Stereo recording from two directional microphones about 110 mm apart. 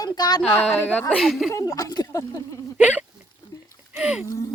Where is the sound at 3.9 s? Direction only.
10° right (ahead or behind).